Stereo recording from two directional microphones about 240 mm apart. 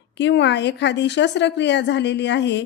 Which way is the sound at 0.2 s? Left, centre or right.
Left.